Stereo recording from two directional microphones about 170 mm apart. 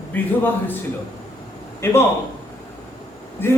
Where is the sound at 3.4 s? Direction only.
15° left (ahead or behind).